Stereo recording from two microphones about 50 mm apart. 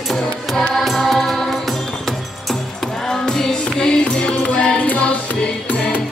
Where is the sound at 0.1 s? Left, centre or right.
Centre; by 5.8 s left.